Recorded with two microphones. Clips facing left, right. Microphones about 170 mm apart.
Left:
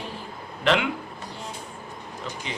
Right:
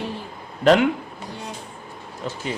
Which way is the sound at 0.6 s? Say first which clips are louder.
Right 7 dB; 40° right (ahead or behind).